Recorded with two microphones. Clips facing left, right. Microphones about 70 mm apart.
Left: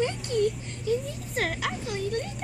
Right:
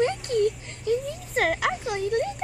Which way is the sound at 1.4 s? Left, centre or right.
Right.